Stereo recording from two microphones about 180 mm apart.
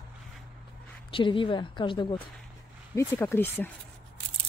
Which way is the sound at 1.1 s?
30° left (ahead or behind).